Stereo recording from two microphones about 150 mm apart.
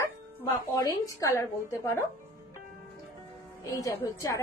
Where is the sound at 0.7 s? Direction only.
20° left (ahead or behind).